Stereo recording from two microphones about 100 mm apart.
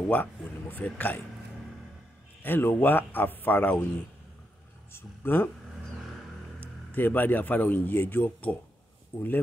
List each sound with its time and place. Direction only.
0.1 s speech: 15° left (ahead or behind)
2.4 s speech: 20° left (ahead or behind)
4.9 s speech: 20° left (ahead or behind)
6.6 s speech: 20° left (ahead or behind)